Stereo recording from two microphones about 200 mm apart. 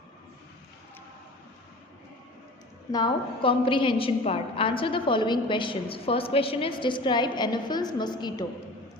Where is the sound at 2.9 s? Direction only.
25° left (ahead or behind).